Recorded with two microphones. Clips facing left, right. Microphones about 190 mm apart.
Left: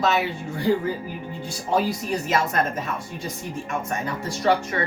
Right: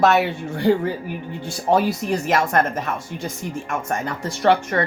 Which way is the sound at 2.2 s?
75° right (ahead or behind).